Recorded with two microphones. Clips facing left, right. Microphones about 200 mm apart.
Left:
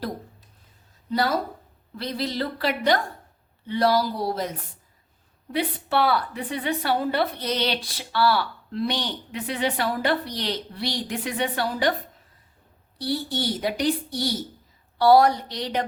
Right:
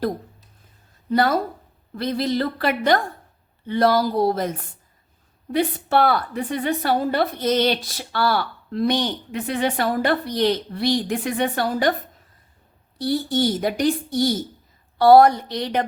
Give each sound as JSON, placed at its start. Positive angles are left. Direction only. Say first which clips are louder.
{"t": 2.0, "sound": "a woman's voice", "louder": "right 6 dB", "side_deg": -50}
{"t": 13.0, "sound": "a woman's voice", "louder": "right 6 dB", "side_deg": -50}